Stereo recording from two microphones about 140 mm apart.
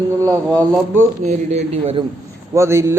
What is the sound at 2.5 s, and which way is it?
Speech, 20° right (ahead or behind).